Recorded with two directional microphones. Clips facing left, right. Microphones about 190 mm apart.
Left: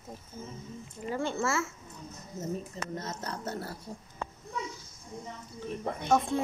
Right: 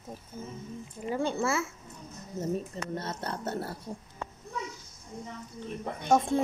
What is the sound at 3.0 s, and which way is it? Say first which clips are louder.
Speech: right 2 dB; 30° right (ahead or behind).